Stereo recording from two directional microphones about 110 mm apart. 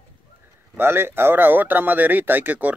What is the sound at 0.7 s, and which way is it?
Speech, 20° right (ahead or behind).